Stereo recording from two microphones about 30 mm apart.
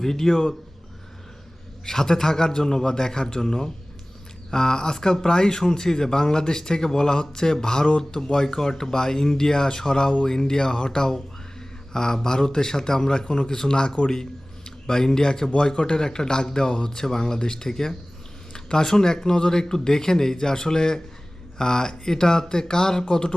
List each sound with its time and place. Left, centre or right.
0.0 s speech: centre
1.8 s speech: centre